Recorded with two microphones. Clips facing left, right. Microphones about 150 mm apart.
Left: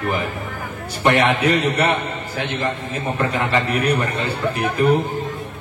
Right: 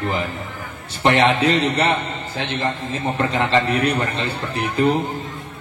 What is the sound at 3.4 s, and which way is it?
Speech, 30° right (ahead or behind).